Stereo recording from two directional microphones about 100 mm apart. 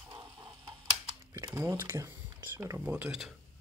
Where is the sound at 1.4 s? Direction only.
30° right (ahead or behind).